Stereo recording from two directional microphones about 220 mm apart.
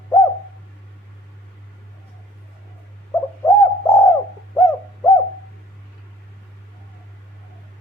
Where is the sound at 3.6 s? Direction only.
15° left (ahead or behind).